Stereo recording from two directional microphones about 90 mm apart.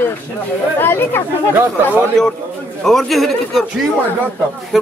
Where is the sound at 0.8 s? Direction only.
25° left (ahead or behind).